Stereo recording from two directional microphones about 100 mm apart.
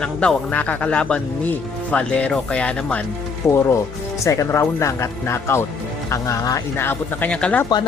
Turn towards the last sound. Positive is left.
turn(degrees=10)  # may be behind; listen again after turning